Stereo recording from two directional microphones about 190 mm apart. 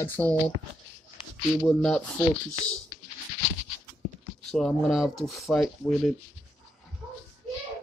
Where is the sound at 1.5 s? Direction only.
5° left (ahead or behind).